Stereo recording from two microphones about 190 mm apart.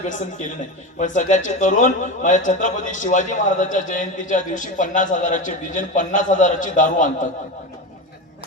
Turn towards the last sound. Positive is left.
turn(degrees=45)  # may be behind; listen again after turning